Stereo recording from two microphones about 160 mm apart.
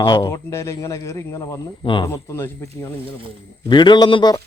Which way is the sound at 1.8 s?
30° left (ahead or behind).